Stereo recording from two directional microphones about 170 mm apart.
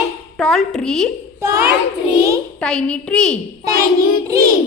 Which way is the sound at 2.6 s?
5° left (ahead or behind).